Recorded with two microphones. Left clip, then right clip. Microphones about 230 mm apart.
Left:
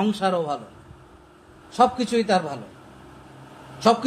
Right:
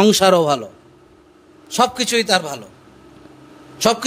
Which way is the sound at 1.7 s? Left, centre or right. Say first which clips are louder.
Right 3 dB; right.